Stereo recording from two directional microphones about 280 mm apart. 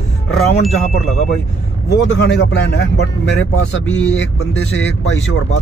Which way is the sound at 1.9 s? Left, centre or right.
Left.